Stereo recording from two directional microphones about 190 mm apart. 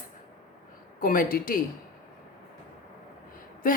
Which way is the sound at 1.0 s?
50° left (ahead or behind).